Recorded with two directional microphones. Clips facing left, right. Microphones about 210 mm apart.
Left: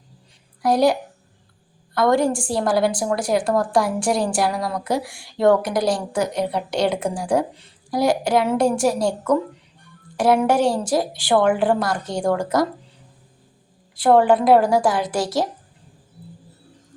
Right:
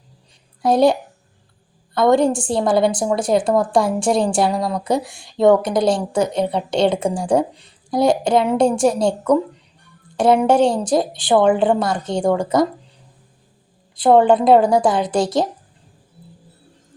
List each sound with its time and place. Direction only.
0.6 s a woman's voice: 25° right (ahead or behind)
2.0 s a woman's voice: 20° right (ahead or behind)
13.9 s a woman's voice: 20° right (ahead or behind)